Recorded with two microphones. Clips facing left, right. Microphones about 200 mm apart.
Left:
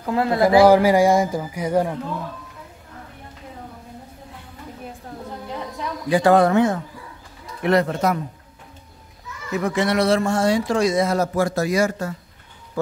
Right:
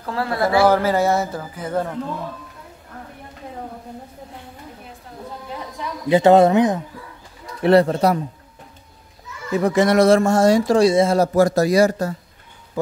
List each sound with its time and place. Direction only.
0.0 s speech: 20° left (ahead or behind)
6.0 s speech: 25° right (ahead or behind)
7.6 s speech: 30° right (ahead or behind)
9.5 s speech: 35° right (ahead or behind)
11.3 s speech: 40° right (ahead or behind)